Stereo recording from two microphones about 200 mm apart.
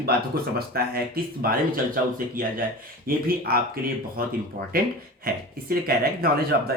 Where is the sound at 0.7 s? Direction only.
50° right (ahead or behind).